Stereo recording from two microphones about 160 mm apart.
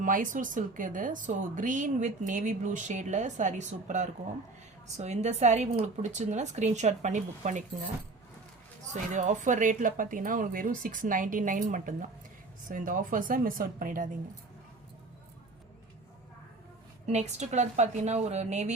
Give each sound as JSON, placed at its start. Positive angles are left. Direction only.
{"t": 0.0, "sound": "speech", "side_deg": -55}
{"t": 8.9, "sound": "speech", "side_deg": -50}
{"t": 17.1, "sound": "speech", "side_deg": -45}